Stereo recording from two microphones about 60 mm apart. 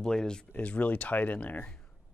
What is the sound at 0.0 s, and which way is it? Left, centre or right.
Speech, centre.